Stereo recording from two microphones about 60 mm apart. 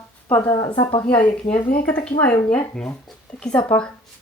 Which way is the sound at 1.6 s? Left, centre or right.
Left.